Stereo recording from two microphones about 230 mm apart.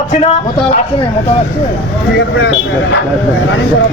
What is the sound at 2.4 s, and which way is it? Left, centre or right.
Speech, left.